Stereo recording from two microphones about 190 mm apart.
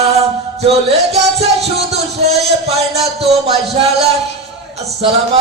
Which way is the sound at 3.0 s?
35° right (ahead or behind).